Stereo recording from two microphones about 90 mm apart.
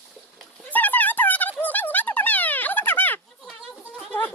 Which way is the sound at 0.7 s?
20° left (ahead or behind).